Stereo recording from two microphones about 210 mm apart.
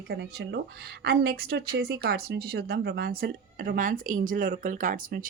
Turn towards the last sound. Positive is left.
turn(degrees=-40)  # may be behind; listen again after turning